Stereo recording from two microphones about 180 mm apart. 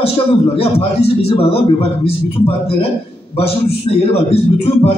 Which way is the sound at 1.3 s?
35° left (ahead or behind).